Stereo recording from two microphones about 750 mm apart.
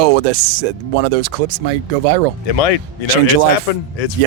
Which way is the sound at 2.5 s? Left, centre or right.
Left.